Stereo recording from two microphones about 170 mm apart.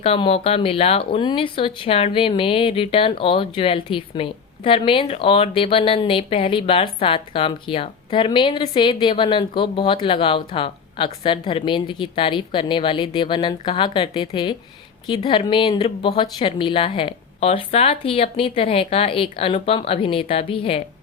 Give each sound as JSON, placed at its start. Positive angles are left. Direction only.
{"t": 0.0, "sound": "speech", "side_deg": 35}